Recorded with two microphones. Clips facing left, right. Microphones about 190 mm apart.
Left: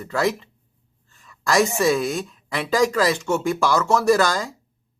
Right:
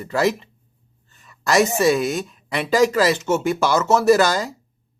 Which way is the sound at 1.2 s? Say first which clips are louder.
Right 2 dB; centre (ahead or behind).